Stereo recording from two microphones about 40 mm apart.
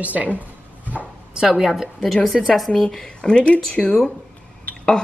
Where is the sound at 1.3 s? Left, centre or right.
Right.